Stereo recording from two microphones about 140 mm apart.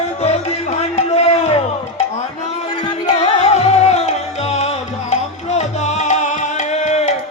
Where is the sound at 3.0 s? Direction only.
50° left (ahead or behind).